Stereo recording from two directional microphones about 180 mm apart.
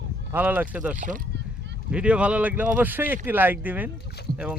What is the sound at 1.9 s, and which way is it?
A man's voice, 5° right (ahead or behind).